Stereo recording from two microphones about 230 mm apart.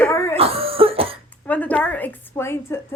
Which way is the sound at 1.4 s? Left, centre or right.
Centre.